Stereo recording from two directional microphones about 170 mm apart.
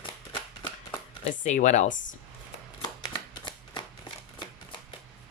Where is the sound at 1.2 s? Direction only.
45° left (ahead or behind).